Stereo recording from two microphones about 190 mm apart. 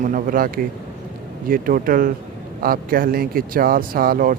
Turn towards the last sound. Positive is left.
turn(degrees=-50)  # may be behind; listen again after turning